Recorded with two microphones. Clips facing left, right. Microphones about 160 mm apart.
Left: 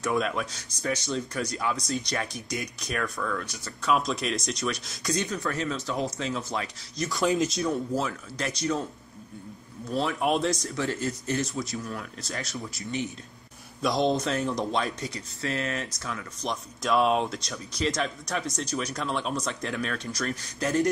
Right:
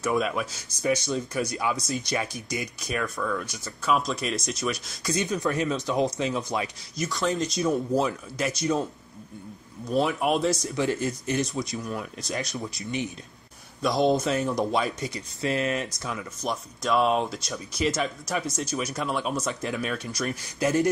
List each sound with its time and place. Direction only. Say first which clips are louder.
0.0 s speech: right 1 dB; 5° right (ahead or behind)
5.2 s speech: right 4 dB; 15° right (ahead or behind)
7.0 s speech: left 2 dB; centre (ahead or behind)
7.7 s speech: right 4 dB; 20° right (ahead or behind)
8.4 s speech: right 2 dB; 5° right (ahead or behind)
9.8 s speech: right 2 dB; 10° right (ahead or behind)
10.7 s speech: right 3 dB; 15° right (ahead or behind)
13.7 s speech: right 2 dB; centre (ahead or behind)
16.8 s speech: even; centre (ahead or behind)